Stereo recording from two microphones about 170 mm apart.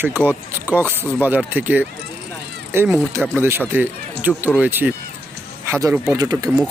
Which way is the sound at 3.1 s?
15° right (ahead or behind).